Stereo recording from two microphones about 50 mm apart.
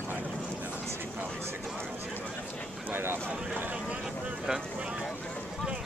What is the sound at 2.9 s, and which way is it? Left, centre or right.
Speech, right.